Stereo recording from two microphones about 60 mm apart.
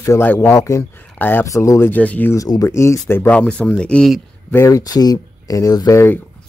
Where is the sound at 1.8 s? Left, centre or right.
Left.